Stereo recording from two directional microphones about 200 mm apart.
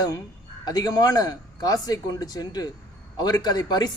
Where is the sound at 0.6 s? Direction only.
20° left (ahead or behind).